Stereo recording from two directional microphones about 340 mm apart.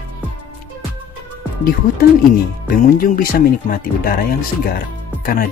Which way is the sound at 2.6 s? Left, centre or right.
Left.